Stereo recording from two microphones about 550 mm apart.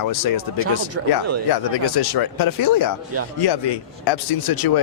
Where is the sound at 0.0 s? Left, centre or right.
Left.